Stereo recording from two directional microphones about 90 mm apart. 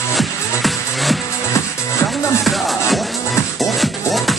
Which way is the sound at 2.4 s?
Centre (ahead or behind).